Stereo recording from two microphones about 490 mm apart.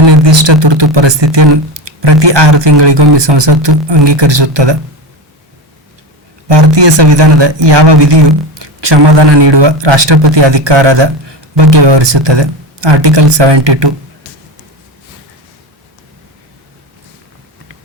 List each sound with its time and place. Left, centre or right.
0.0 s a man's voice: right
6.5 s a man's voice: right